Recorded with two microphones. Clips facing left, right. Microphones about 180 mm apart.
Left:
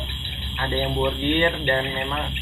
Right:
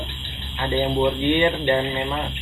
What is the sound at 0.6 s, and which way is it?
Speech, 15° right (ahead or behind).